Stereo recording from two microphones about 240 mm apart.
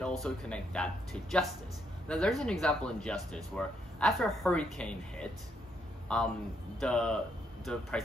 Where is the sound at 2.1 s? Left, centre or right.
Centre.